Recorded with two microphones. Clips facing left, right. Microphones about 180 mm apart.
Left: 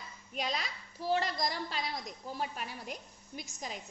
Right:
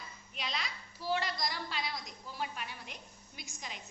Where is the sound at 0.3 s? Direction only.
40° left (ahead or behind).